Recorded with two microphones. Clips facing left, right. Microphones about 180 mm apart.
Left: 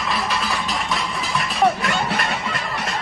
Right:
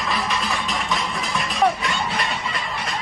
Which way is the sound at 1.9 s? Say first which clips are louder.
Left 3 dB; 60° left (ahead or behind).